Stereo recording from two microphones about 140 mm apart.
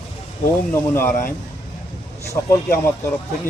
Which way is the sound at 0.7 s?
15° left (ahead or behind).